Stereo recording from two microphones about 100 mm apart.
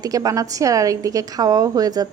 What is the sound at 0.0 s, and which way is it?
A woman's voice, 40° right (ahead or behind).